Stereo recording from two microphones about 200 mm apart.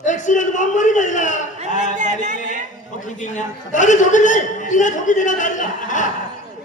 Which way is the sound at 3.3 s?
40° left (ahead or behind).